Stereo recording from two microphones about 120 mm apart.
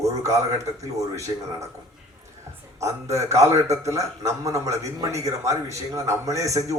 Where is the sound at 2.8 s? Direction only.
25° right (ahead or behind).